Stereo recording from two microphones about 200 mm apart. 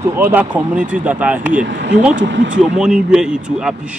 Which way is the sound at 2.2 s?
65° right (ahead or behind).